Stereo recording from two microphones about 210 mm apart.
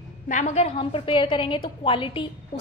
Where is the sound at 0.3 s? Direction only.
30° left (ahead or behind).